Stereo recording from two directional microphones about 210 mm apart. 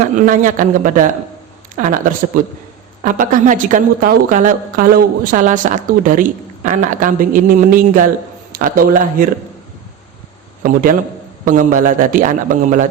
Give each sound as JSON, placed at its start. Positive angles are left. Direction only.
{"t": 0.3, "sound": "a woman's voice", "side_deg": -40}
{"t": 10.6, "sound": "a man's voice", "side_deg": -40}